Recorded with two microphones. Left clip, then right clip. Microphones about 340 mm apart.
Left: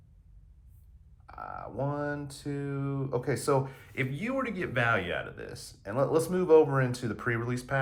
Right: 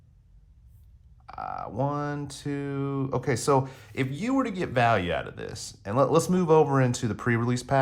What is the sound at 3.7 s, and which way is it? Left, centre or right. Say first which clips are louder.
Speech: right 2 dB; centre.